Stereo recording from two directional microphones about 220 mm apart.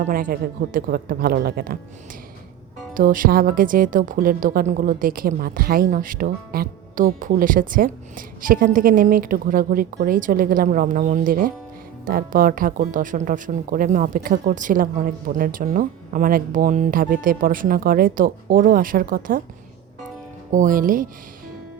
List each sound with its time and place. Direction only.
0.0 s speech: 40° right (ahead or behind)
2.9 s speech: 40° right (ahead or behind)
20.5 s speech: 35° right (ahead or behind)